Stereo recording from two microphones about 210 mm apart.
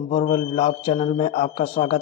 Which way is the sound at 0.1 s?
30° left (ahead or behind).